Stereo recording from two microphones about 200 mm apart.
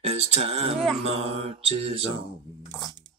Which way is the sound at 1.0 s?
30° right (ahead or behind).